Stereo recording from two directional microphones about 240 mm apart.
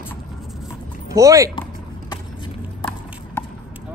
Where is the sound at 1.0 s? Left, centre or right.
Centre.